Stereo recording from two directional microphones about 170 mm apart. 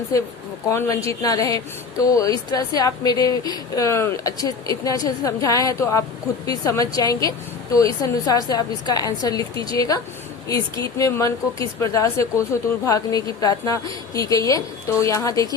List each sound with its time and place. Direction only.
0.7 s speech: 15° left (ahead or behind)